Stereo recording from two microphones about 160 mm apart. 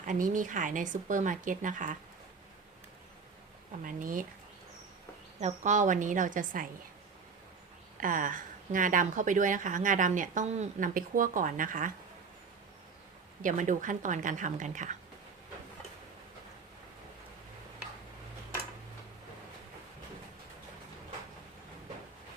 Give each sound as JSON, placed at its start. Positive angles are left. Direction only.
{"t": 0.0, "sound": "speech", "side_deg": -55}
{"t": 3.8, "sound": "a woman's voice", "side_deg": -60}
{"t": 5.4, "sound": "speech", "side_deg": -45}
{"t": 8.0, "sound": "a woman's voice", "side_deg": -55}
{"t": 13.4, "sound": "speech", "side_deg": -55}